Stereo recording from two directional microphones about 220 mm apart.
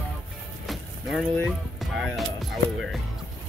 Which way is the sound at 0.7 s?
Centre (ahead or behind).